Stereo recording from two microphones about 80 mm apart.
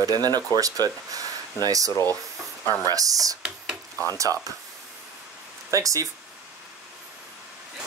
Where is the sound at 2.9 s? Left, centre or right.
Right.